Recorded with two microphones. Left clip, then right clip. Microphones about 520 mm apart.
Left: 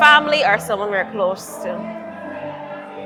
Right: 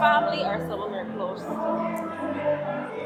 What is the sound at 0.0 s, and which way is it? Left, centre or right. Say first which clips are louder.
Speech: left 9 dB; left.